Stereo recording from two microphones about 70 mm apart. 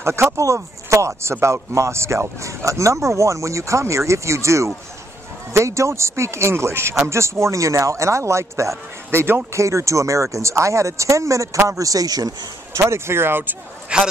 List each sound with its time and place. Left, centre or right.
0.0 s speech: right
12.7 s speech: right
13.9 s a man's voice: centre